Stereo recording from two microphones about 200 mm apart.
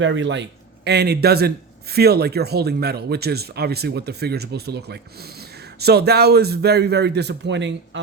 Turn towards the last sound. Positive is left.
turn(degrees=-60)  # may be behind; listen again after turning